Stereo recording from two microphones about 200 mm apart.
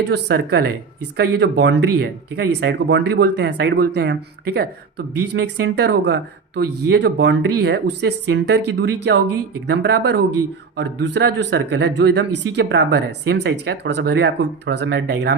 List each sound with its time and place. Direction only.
0.0 s speech: 55° right (ahead or behind)